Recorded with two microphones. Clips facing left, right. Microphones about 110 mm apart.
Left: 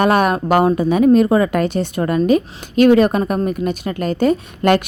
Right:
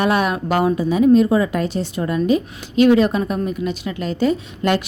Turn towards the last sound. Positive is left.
turn(degrees=55)  # may be behind; listen again after turning